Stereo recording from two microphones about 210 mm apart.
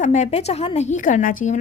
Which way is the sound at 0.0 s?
35° left (ahead or behind).